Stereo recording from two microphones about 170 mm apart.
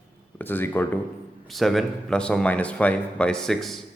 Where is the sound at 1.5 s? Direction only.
Centre (ahead or behind).